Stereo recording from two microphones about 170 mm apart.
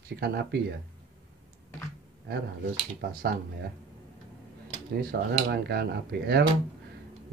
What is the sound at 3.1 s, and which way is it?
Speech, 60° right (ahead or behind).